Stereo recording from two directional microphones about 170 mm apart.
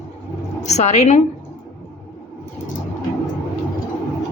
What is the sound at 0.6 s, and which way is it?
Speech, 40° left (ahead or behind).